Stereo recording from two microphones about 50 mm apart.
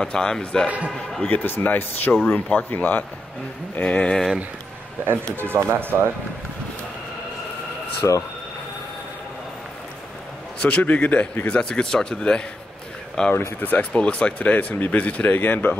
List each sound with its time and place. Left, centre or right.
0.0 s a man's voice: centre
0.7 s a man's voice: right
1.3 s speech: left
3.7 s speech: left
5.0 s speech: right
8.0 s speech: left
10.8 s speech: left
11.4 s a man's voice: centre
13.6 s speech: left
13.9 s speech: left
15.2 s speech: left